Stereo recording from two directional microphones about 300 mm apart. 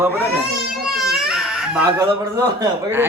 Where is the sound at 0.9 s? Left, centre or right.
Centre.